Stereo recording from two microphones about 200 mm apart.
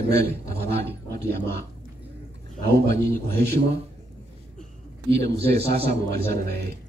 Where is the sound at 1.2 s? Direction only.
10° left (ahead or behind).